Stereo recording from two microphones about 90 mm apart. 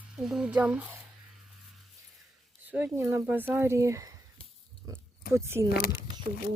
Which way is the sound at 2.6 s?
20° right (ahead or behind).